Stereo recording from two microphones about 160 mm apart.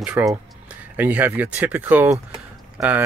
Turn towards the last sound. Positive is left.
turn(degrees=-10)  # may be behind; listen again after turning